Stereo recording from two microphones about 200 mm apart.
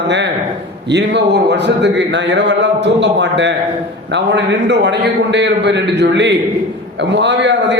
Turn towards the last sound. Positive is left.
turn(degrees=-60)  # may be behind; listen again after turning